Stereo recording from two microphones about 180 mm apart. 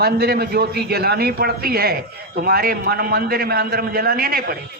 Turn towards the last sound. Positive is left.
turn(degrees=-55)  # may be behind; listen again after turning